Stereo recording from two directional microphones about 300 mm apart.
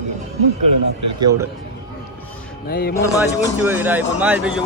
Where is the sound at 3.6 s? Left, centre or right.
Centre.